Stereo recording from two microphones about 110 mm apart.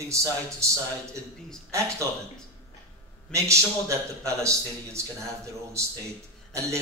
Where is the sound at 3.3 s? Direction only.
25° right (ahead or behind).